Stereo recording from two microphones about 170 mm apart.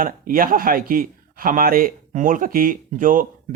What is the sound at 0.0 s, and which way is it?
A man's voice, 55° right (ahead or behind).